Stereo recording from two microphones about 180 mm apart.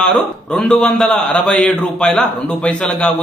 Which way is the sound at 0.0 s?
5° left (ahead or behind).